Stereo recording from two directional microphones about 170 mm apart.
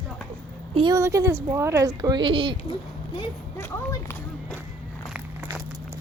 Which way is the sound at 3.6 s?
15° left (ahead or behind).